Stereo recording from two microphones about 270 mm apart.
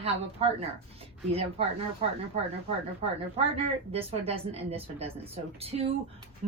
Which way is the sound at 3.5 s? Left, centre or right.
Right.